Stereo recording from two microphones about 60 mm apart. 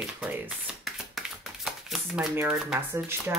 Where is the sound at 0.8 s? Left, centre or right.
Centre.